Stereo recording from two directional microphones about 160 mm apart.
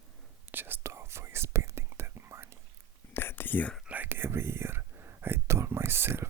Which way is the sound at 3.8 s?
10° right (ahead or behind).